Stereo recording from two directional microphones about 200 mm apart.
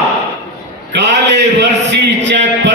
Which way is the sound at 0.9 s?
60° right (ahead or behind).